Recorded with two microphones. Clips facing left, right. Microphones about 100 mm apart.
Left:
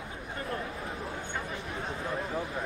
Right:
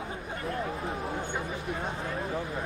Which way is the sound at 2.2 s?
Centre (ahead or behind).